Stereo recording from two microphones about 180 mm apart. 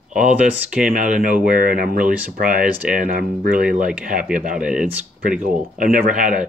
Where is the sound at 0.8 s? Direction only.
45° right (ahead or behind).